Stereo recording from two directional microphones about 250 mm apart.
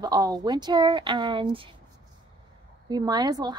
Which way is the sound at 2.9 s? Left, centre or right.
Centre.